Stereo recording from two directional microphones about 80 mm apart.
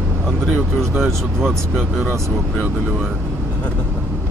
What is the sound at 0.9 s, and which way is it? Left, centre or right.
Speech, centre.